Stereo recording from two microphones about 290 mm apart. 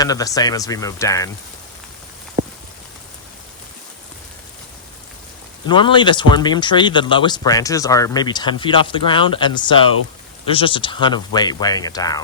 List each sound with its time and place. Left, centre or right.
0.0 s speech: centre
5.6 s speech: centre